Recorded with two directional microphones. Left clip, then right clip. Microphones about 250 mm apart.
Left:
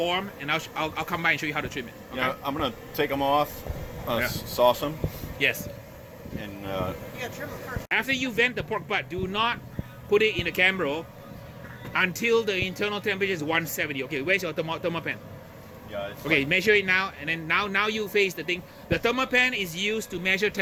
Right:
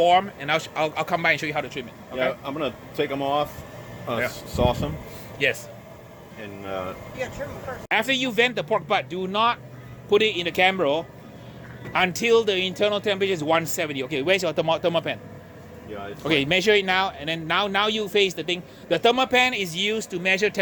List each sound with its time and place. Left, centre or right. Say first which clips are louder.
0.0 s a man's voice: right 9 dB; centre
2.1 s speech: right 2 dB; left
4.5 s speech: left 3 dB; left
5.4 s speech: right 2 dB; centre
6.4 s speech: right 1 dB; left
7.9 s a man's voice: right 4 dB; centre
16.2 s a man's voice: right 2 dB; centre